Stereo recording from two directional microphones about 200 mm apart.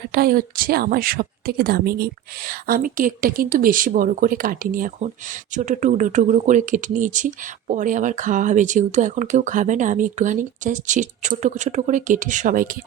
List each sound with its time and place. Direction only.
0.1 s speech: 50° right (ahead or behind)